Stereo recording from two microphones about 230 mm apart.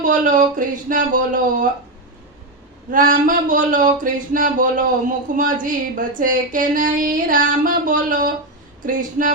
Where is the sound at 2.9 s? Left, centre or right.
Right.